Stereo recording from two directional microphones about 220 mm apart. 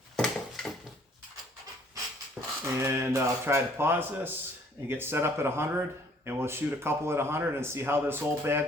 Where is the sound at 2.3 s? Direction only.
10° right (ahead or behind).